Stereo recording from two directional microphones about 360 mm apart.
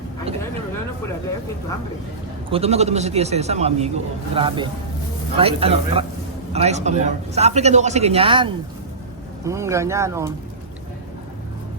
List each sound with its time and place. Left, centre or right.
2.5 s a man's voice: centre